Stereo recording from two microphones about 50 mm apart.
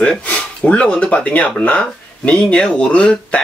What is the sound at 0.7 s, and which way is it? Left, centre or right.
Speech, left.